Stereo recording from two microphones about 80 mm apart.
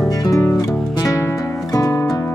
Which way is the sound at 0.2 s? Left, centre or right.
Left.